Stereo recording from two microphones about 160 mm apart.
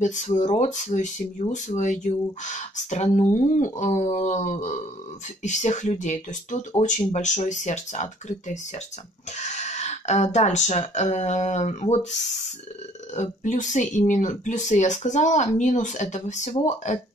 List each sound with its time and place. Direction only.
0.0 s speech: 50° left (ahead or behind)